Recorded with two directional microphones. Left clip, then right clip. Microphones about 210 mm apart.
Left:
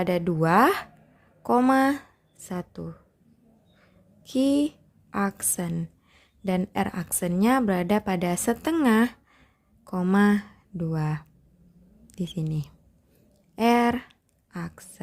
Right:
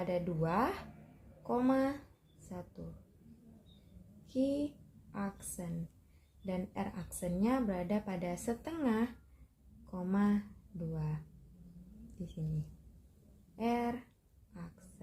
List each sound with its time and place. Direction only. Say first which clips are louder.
0.0 s speech: left 11 dB; 55° left (ahead or behind)
4.3 s a woman's voice: left 11 dB; 55° left (ahead or behind)
12.2 s speech: left 13 dB; 55° left (ahead or behind)